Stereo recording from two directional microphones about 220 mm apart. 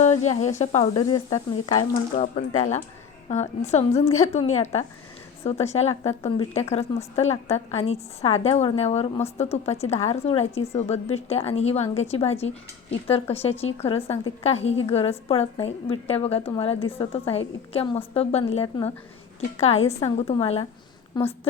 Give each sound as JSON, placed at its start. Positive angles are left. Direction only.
{"t": 0.0, "sound": "speech", "side_deg": 30}
{"t": 2.1, "sound": "a woman's voice", "side_deg": 35}